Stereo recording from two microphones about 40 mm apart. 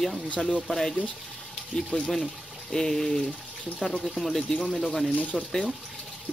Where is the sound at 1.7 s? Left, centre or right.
Centre.